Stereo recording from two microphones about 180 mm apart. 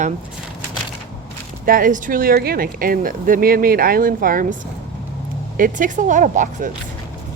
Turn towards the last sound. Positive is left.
turn(degrees=-45)  # may be behind; listen again after turning